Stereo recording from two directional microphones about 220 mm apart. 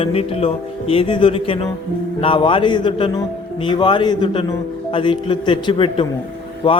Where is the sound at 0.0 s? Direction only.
25° left (ahead or behind).